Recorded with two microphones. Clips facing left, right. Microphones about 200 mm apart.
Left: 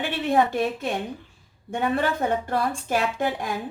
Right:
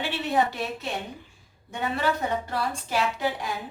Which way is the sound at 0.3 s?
50° left (ahead or behind).